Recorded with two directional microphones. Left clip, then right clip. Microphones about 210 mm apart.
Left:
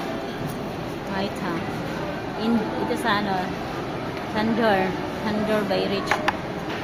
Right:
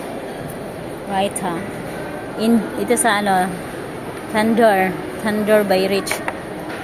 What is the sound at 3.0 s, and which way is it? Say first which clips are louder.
Speech: right 8 dB; 40° right (ahead or behind).